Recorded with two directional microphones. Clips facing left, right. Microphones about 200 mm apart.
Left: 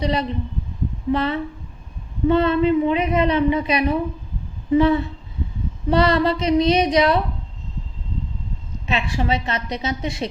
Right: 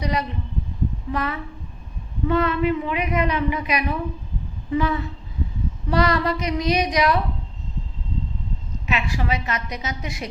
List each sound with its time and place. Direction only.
0.0 s a woman's voice: 25° left (ahead or behind)
8.9 s a woman's voice: 30° left (ahead or behind)